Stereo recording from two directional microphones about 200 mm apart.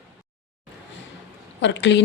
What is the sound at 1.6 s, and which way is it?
Speech, 65° left (ahead or behind).